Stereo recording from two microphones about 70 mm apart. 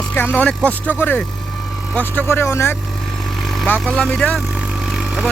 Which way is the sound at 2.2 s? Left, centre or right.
Left.